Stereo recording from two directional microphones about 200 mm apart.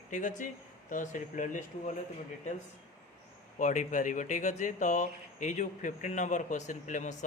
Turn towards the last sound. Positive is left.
turn(degrees=40)  # may be behind; listen again after turning